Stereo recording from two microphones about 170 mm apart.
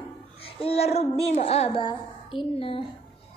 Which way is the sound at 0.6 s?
35° left (ahead or behind).